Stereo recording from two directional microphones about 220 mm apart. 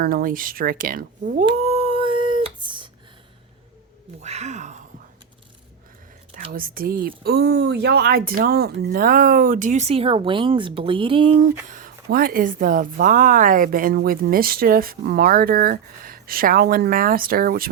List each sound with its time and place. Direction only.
0.0 s speech: 40° right (ahead or behind)
1.5 s a sound: 30° right (ahead or behind)
4.2 s speech: 30° right (ahead or behind)
6.5 s speech: 40° right (ahead or behind); by 11.4 s 25° right (ahead or behind)
11.7 s speech: 40° right (ahead or behind)